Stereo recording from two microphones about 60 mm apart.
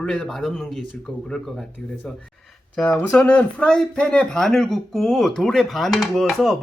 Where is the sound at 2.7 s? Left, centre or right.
Centre.